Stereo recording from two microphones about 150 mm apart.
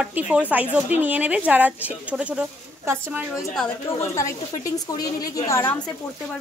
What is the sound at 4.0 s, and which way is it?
A woman's voice, 20° left (ahead or behind).